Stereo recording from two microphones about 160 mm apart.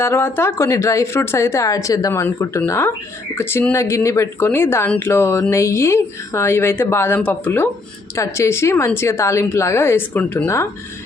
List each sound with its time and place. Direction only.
0.0 s speech: 15° left (ahead or behind)